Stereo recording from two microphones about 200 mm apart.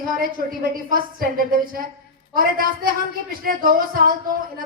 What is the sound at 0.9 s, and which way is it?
A woman's voice, 45° right (ahead or behind).